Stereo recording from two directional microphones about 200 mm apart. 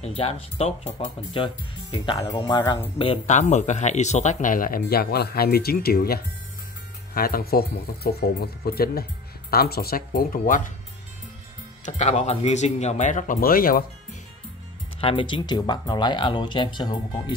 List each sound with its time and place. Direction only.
0.0 s speech: 30° left (ahead or behind)
3.0 s speech: 30° left (ahead or behind)
11.8 s speech: 35° left (ahead or behind)
15.0 s speech: 30° left (ahead or behind)